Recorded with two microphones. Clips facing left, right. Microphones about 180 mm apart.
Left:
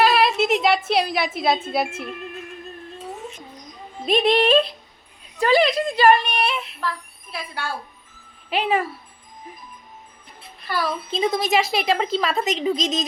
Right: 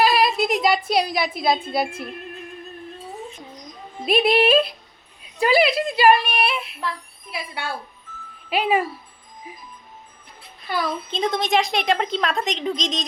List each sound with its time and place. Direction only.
0.0 s a woman's voice: centre (ahead or behind)
4.0 s a woman's voice: 10° right (ahead or behind)
11.1 s a woman's voice: 5° left (ahead or behind)